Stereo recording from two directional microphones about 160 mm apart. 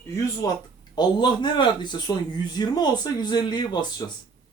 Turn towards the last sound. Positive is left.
turn(degrees=25)  # may be behind; listen again after turning